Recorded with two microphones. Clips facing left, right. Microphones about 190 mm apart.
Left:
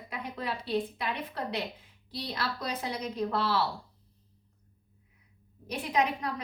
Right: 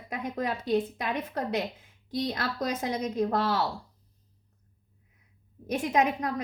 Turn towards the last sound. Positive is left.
turn(degrees=-45)  # may be behind; listen again after turning